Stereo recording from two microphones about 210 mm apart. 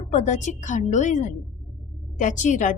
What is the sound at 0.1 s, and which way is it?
A woman's voice, 35° left (ahead or behind).